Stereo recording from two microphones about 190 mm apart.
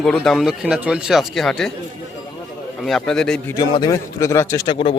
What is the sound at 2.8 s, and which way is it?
Speech, centre (ahead or behind).